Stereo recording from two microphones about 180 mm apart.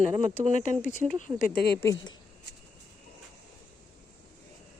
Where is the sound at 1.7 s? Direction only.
15° left (ahead or behind).